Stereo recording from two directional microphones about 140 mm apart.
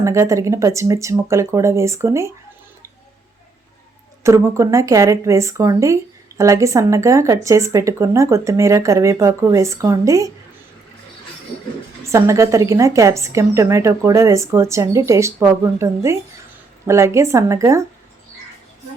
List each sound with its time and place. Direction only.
0.0 s speech: 20° right (ahead or behind)
4.2 s speech: 20° right (ahead or behind)
12.0 s speech: 20° right (ahead or behind)